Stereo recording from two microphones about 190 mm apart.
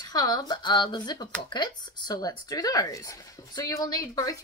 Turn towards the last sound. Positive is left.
turn(degrees=20)  # may be behind; listen again after turning